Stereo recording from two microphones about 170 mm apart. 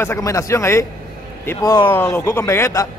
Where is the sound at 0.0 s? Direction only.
15° left (ahead or behind).